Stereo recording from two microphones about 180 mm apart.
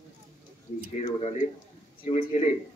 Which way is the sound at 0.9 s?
40° left (ahead or behind).